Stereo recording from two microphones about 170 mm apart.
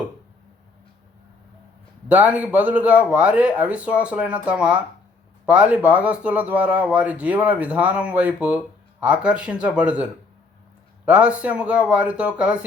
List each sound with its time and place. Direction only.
2.0 s speech: 10° right (ahead or behind)